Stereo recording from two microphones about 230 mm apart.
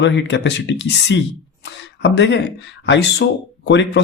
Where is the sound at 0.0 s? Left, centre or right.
Left.